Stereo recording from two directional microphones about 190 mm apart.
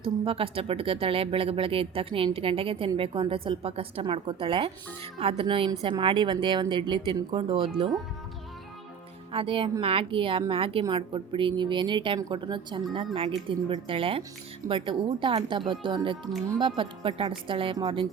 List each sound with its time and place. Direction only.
0.0 s speech: 30° right (ahead or behind)
9.3 s speech: 30° right (ahead or behind)